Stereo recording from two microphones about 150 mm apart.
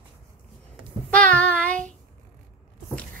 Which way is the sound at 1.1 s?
10° left (ahead or behind).